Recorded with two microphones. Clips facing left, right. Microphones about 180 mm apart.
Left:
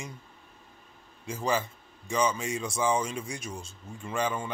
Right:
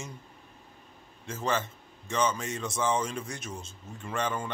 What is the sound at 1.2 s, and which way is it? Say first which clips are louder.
A man's voice: left 1 dB; 10° left (ahead or behind).